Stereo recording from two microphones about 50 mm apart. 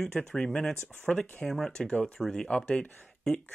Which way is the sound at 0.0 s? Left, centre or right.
Centre.